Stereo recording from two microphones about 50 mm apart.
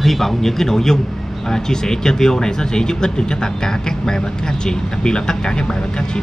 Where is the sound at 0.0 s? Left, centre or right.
Centre.